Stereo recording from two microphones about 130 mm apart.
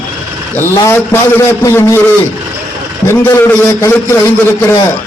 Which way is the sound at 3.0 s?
20° left (ahead or behind).